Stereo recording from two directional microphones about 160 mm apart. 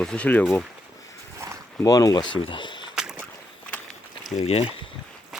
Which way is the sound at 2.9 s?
5° right (ahead or behind).